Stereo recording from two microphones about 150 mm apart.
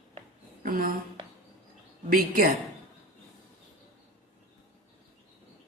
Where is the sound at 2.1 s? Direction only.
75° right (ahead or behind).